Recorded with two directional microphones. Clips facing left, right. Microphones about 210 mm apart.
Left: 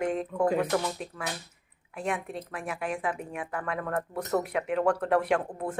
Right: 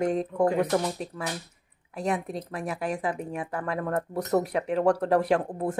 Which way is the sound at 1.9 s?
40° right (ahead or behind).